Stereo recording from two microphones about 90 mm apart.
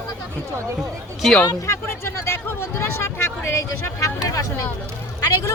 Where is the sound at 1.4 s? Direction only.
40° left (ahead or behind).